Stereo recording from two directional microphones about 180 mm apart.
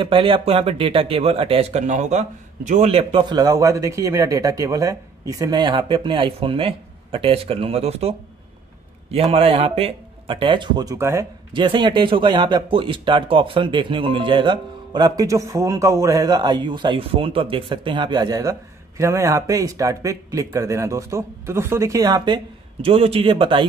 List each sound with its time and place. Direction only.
0.0 s a man's voice: 30° right (ahead or behind)
11.5 s speech: 25° right (ahead or behind)